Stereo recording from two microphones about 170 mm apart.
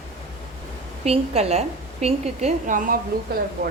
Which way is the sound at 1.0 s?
35° right (ahead or behind).